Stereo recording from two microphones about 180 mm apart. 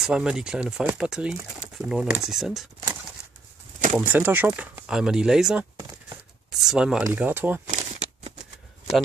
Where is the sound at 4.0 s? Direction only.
10° right (ahead or behind).